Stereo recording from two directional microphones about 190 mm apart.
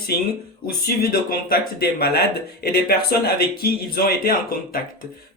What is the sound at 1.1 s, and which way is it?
Speech, 50° left (ahead or behind).